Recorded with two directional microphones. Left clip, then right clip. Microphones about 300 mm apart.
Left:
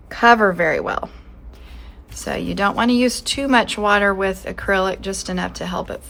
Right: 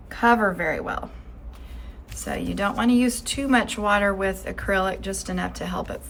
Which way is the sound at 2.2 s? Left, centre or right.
Centre.